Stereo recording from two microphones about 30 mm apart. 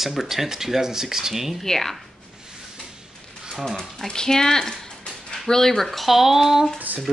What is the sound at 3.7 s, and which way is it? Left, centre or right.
Speech, left.